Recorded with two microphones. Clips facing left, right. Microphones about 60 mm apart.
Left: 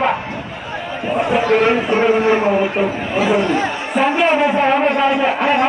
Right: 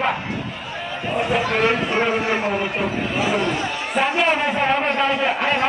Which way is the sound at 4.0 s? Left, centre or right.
Centre.